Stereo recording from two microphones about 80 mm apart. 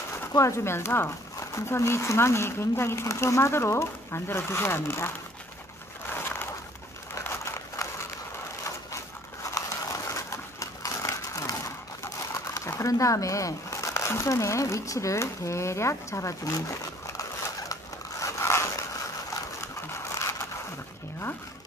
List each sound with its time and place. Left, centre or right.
0.3 s speech: left
7.2 s a sound: left
8.6 s crushing: left
12.5 s speech: left
18.2 s biting: left
19.6 s a sound: left